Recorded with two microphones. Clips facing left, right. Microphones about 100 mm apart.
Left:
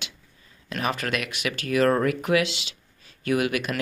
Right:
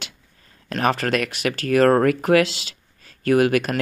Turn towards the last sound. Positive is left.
turn(degrees=-45)  # may be behind; listen again after turning